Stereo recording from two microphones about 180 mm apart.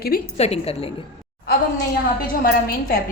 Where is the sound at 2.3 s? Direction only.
55° left (ahead or behind).